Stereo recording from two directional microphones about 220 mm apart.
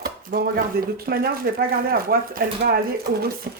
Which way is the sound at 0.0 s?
45° right (ahead or behind).